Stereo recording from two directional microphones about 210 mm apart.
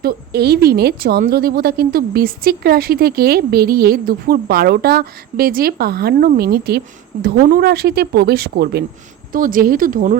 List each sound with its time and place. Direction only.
0.0 s speech: 50° right (ahead or behind)